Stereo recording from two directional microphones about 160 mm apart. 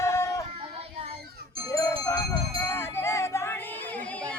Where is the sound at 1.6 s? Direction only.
20° left (ahead or behind).